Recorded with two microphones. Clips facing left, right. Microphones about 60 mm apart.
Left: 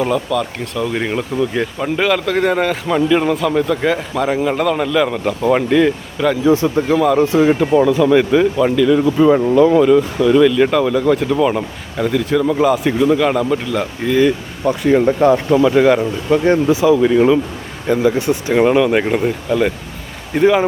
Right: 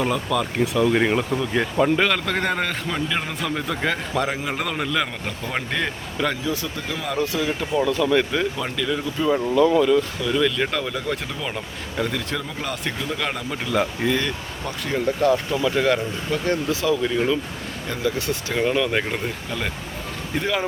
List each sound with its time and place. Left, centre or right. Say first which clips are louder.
0.0 s speech: left 5 dB; centre
5.4 s speech: left 14 dB; centre
5.7 s speech: left 12 dB; centre
6.4 s speech: left 13 dB; left
8.1 s speech: left 9 dB; centre
9.1 s speech: left 7 dB; left
9.8 s speech: left 8 dB; centre
14.2 s speech: left 12 dB; centre
14.7 s speech: left 11 dB; left
15.7 s speech: left 7 dB; centre
16.3 s speech: left 11 dB; left